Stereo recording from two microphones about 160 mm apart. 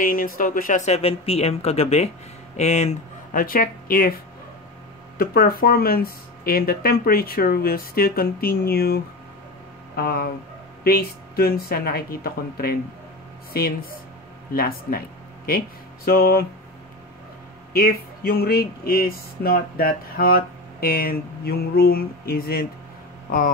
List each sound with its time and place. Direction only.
0.0 s speech: 60° left (ahead or behind)
3.3 s speech: 60° left (ahead or behind)
5.1 s speech: 70° left (ahead or behind)
17.7 s speech: 65° left (ahead or behind)